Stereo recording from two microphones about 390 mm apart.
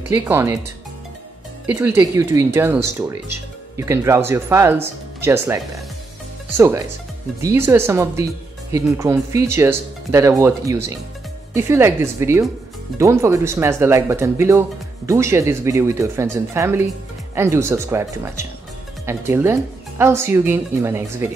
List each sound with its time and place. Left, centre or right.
0.1 s speech: centre
1.7 s speech: centre